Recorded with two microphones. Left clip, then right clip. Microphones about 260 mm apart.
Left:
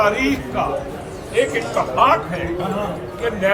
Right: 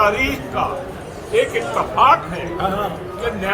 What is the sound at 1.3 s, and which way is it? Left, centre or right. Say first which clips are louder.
Speech: right 1 dB; centre.